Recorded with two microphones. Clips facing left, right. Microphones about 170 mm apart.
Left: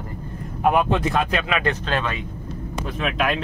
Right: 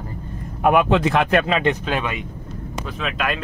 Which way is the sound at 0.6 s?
65° right (ahead or behind).